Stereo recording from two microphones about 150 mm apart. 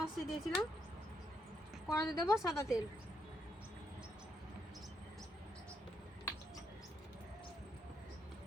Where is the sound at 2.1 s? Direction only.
20° left (ahead or behind).